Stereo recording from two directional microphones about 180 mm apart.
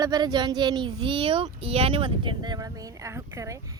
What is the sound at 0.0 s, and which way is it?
Speech, 20° right (ahead or behind).